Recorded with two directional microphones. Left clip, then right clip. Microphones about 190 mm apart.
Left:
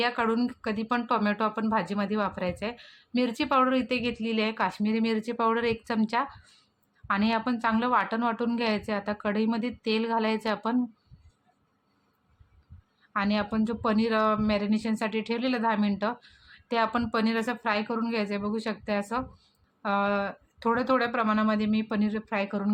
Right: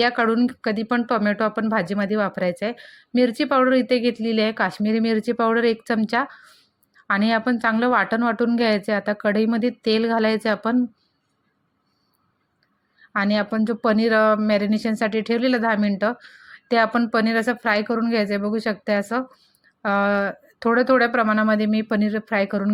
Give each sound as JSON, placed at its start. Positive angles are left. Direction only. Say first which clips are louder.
{"t": 0.0, "sound": "speech", "louder": "right 7 dB", "side_deg": -20}
{"t": 13.1, "sound": "speech", "louder": "right 6 dB", "side_deg": -25}